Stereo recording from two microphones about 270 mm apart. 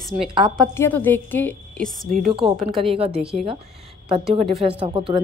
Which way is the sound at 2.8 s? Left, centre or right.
Right.